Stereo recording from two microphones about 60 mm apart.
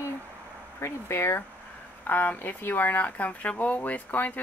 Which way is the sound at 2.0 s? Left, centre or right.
Left.